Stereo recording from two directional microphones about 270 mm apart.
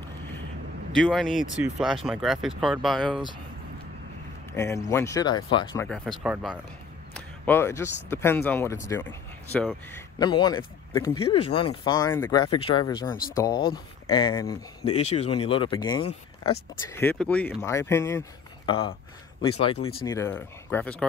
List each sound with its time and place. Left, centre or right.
0.9 s speech: centre
4.6 s speech: centre
5.9 s speech: centre
7.2 s speech: centre
14.9 s speech: left
16.9 s speech: centre
20.1 s speech: centre